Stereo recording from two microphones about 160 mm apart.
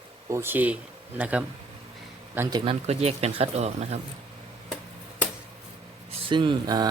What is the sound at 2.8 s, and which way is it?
Speech, 40° right (ahead or behind).